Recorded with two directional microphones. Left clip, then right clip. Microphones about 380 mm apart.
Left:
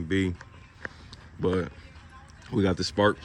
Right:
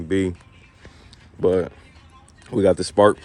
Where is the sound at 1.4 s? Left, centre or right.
Centre.